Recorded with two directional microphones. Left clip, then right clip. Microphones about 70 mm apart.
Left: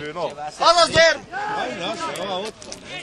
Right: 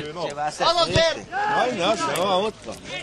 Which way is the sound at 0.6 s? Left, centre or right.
Left.